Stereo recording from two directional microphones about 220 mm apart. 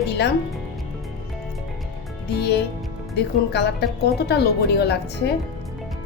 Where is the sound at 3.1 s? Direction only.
50° left (ahead or behind).